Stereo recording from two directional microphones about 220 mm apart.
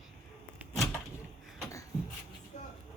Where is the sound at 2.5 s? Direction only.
35° left (ahead or behind).